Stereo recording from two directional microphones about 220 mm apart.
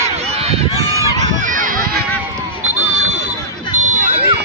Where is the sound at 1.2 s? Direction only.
35° right (ahead or behind).